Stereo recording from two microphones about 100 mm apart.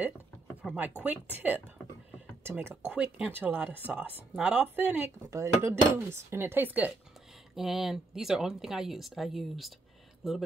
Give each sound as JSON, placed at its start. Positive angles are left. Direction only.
{"t": 0.6, "sound": "speech", "side_deg": -5}
{"t": 1.0, "sound": "speech", "side_deg": -15}
{"t": 5.3, "sound": "speech", "side_deg": -30}
{"t": 7.5, "sound": "speech", "side_deg": -5}